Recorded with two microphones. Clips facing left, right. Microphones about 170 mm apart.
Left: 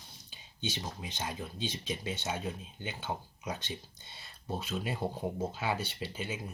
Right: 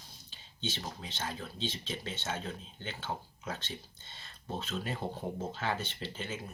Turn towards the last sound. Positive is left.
turn(degrees=10)  # may be behind; listen again after turning